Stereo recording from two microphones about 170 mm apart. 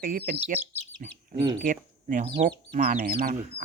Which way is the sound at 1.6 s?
50° right (ahead or behind).